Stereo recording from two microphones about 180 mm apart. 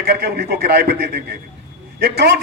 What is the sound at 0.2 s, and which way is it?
A man's voice, 60° right (ahead or behind).